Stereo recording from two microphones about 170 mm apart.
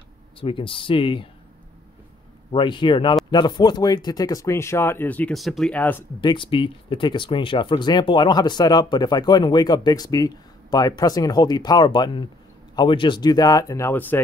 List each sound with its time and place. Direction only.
0.4 s speech: 30° left (ahead or behind)
2.5 s speech: 30° left (ahead or behind); by 6.0 s 10° left (ahead or behind)
6.2 s speech: 30° left (ahead or behind); by 14.2 s 15° left (ahead or behind)